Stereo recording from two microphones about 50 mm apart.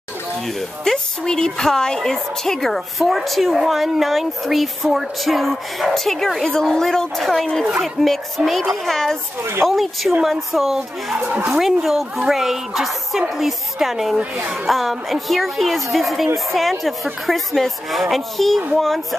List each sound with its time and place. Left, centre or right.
0.6 s a woman's voice: centre
8.4 s a woman's voice: centre
8.8 s speech: centre
9.4 s speech: right
9.7 s a woman's voice: centre
11.2 s speech: right
11.5 s a woman's voice: centre